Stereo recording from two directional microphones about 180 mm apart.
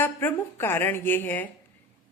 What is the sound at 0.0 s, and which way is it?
A woman's voice, 10° left (ahead or behind).